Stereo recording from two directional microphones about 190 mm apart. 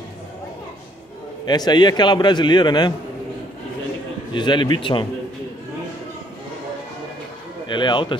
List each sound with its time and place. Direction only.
1.4 s a man's voice: 20° left (ahead or behind)
4.3 s a man's voice: 25° left (ahead or behind)
7.6 s a man's voice: 25° left (ahead or behind)